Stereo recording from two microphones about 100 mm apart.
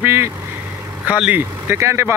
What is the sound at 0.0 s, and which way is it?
Vehicle, 25° right (ahead or behind).